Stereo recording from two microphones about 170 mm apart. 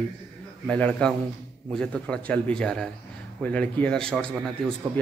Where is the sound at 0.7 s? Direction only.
5° left (ahead or behind).